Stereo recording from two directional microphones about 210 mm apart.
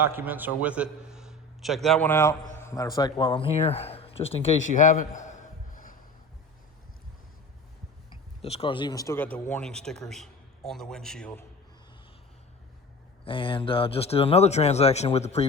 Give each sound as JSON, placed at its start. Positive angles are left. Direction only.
{"t": 0.0, "sound": "a man's voice", "side_deg": -10}
{"t": 8.4, "sound": "a man's voice", "side_deg": 30}
{"t": 13.2, "sound": "a man's voice", "side_deg": 25}